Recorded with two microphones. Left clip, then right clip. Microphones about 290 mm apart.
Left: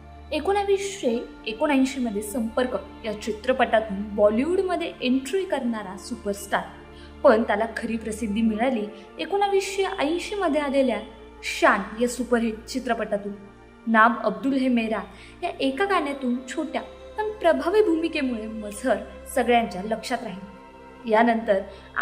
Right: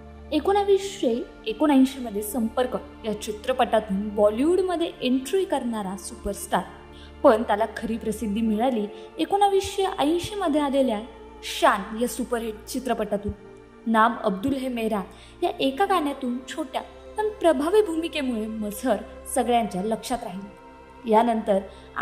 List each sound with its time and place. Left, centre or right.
0.3 s a woman's voice: centre